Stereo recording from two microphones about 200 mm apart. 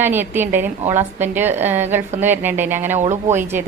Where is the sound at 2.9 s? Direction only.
35° right (ahead or behind).